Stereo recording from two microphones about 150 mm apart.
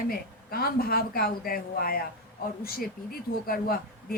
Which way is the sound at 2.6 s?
90° left.